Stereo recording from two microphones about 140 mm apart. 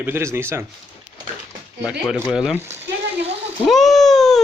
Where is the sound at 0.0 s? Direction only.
20° right (ahead or behind).